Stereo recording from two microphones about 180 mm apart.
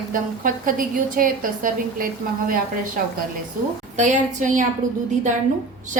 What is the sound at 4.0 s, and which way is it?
Speech, 45° right (ahead or behind).